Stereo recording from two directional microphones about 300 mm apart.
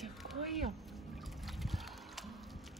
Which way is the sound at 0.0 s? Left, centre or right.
Centre.